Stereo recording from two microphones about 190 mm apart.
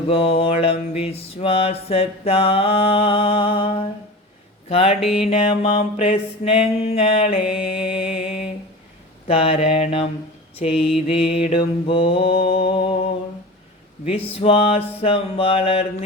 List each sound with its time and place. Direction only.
0.1 s mantra: 35° left (ahead or behind)
4.9 s music: centre (ahead or behind)
5.3 s mantra: 30° left (ahead or behind)
7.9 s music: 5° right (ahead or behind)
9.2 s mantra: 30° left (ahead or behind)
14.0 s mantra: 30° left (ahead or behind)